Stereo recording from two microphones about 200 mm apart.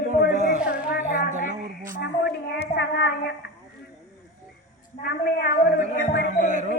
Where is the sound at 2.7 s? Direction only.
60° left (ahead or behind).